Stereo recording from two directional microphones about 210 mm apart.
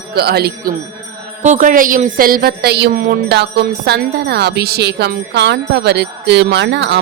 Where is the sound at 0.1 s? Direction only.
50° right (ahead or behind).